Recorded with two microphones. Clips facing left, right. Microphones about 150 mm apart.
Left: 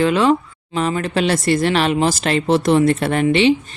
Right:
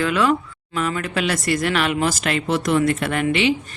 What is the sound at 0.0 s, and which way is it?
A woman's voice, 25° left (ahead or behind).